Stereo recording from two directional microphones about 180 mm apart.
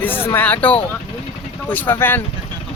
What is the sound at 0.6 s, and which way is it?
Speech, 30° left (ahead or behind).